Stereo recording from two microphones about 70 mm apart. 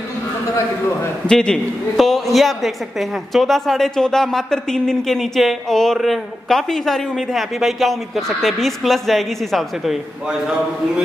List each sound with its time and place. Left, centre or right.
1.2 s a man's voice: centre